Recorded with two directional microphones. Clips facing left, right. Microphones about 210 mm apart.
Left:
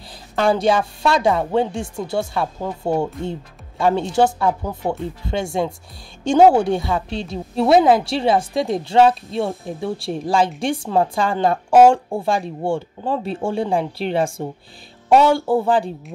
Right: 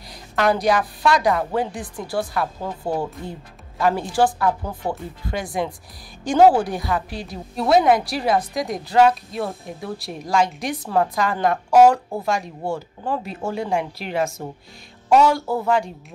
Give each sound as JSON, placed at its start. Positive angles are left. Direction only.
{"t": 0.4, "sound": "speech", "side_deg": 30}